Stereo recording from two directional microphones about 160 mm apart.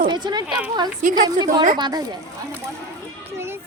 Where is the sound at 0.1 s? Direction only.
25° right (ahead or behind).